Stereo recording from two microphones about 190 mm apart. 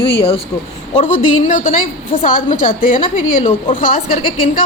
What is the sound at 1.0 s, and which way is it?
A woman's voice, 40° left (ahead or behind).